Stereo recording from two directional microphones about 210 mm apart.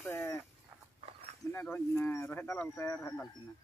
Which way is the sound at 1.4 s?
10° left (ahead or behind).